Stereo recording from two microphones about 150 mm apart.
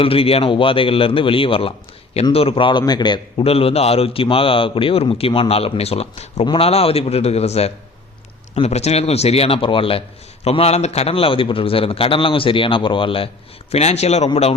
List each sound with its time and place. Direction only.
0.0 s a man's voice: 40° left (ahead or behind)